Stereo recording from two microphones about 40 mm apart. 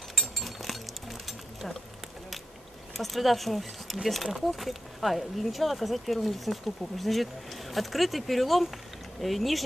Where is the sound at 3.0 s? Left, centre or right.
Centre.